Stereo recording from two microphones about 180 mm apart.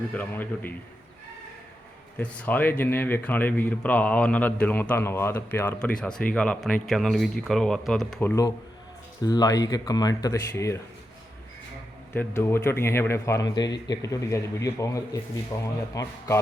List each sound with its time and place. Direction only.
0.1 s speech: 10° left (ahead or behind)
2.1 s speech: 10° left (ahead or behind)
12.1 s speech: 10° left (ahead or behind)